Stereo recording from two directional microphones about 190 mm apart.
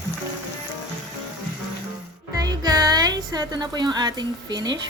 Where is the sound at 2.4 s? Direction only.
20° right (ahead or behind).